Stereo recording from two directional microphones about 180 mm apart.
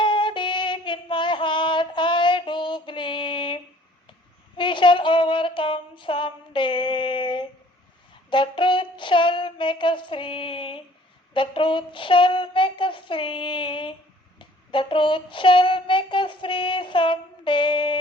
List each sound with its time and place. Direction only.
0.0 s female singing: 25° left (ahead or behind)
4.5 s a sound: 25° left (ahead or behind)
11.3 s child singing: 30° left (ahead or behind)